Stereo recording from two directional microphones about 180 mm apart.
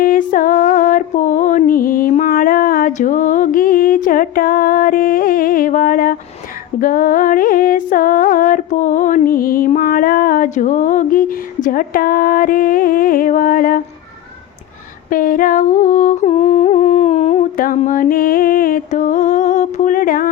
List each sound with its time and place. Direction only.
0.0 s female singing: 50° left (ahead or behind)
6.7 s a sound: 50° left (ahead or behind)
15.1 s humming: 50° left (ahead or behind)